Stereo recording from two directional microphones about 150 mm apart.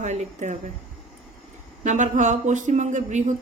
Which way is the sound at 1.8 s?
55° right (ahead or behind).